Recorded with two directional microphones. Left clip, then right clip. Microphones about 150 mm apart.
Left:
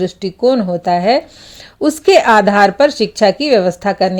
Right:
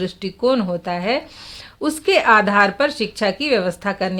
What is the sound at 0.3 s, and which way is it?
Speech, 30° left (ahead or behind).